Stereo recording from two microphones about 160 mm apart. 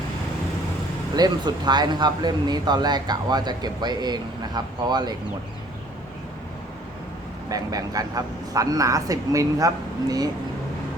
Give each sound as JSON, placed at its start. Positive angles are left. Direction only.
{"t": 1.1, "sound": "speech", "side_deg": -25}
{"t": 7.5, "sound": "speech", "side_deg": -20}